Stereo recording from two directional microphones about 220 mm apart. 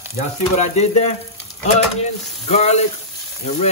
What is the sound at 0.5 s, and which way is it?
Speech, 30° left (ahead or behind).